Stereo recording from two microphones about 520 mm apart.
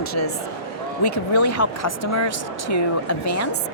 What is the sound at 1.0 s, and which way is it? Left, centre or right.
Speech, left.